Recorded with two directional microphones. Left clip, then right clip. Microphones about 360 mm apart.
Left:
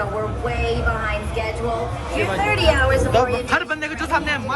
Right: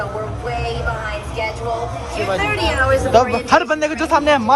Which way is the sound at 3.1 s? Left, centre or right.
Centre.